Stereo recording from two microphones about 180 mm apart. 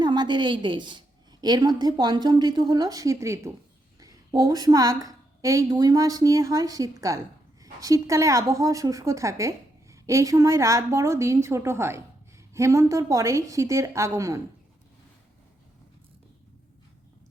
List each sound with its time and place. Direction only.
0.0 s a woman's voice: 25° right (ahead or behind)